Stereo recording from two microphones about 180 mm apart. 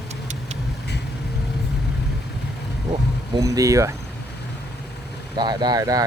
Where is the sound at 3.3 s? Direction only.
20° right (ahead or behind).